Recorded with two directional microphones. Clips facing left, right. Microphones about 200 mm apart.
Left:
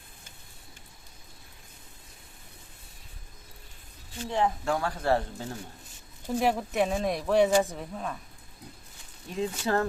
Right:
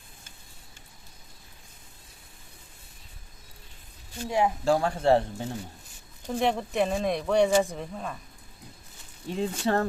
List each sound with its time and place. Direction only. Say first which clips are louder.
4.3 s speech: right 2 dB; 10° right (ahead or behind)
4.6 s speech: right 5 dB; 30° right (ahead or behind)
6.2 s speech: even; 5° left (ahead or behind)
9.3 s speech: right 2 dB; 30° right (ahead or behind)